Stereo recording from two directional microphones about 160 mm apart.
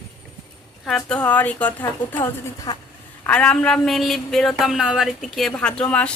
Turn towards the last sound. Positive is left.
turn(degrees=5)  # may be behind; listen again after turning